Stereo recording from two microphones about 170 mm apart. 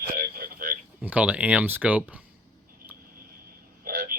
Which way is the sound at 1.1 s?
10° right (ahead or behind).